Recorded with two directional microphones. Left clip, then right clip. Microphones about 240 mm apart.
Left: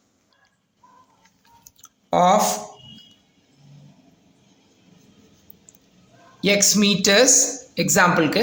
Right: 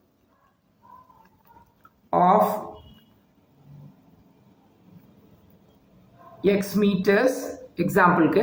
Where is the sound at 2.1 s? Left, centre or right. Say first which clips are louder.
Left 2 dB; left.